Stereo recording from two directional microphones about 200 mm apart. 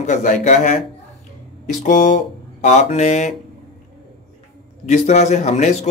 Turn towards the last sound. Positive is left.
turn(degrees=35)  # may be behind; listen again after turning